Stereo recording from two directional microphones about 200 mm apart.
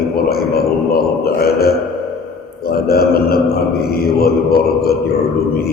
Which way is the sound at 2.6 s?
50° left (ahead or behind).